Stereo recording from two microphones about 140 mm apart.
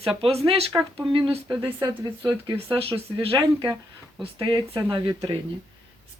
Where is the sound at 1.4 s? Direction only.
20° right (ahead or behind).